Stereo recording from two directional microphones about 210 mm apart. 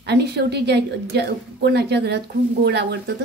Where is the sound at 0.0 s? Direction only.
50° right (ahead or behind).